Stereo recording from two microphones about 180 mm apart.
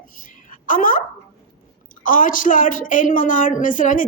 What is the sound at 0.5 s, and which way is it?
Speech, 50° left (ahead or behind).